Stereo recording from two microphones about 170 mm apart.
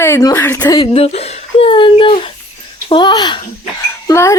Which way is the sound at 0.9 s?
40° left (ahead or behind).